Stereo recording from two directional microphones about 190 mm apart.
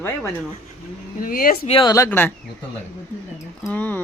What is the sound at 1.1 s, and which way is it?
Speech, 50° left (ahead or behind).